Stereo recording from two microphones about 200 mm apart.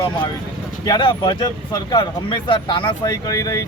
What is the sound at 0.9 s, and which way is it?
Speech, 25° left (ahead or behind).